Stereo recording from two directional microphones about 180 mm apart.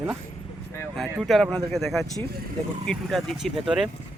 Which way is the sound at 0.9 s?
Centre (ahead or behind).